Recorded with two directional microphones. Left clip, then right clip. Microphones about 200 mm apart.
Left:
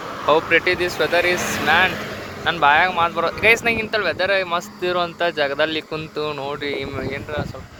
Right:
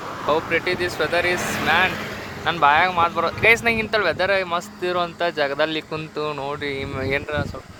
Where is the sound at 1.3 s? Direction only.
55° left (ahead or behind).